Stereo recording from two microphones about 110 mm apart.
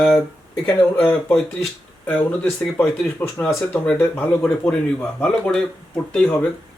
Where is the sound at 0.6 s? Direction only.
20° left (ahead or behind).